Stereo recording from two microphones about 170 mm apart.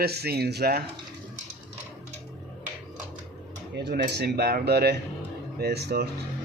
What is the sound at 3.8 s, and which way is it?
Speech, 75° right (ahead or behind).